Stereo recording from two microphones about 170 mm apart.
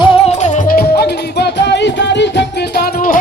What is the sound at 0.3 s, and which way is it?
Music, 45° left (ahead or behind).